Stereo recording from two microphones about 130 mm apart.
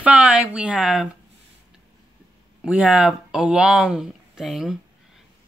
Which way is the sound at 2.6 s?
10° right (ahead or behind).